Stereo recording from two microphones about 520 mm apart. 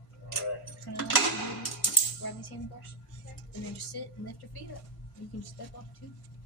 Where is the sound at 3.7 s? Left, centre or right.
Left.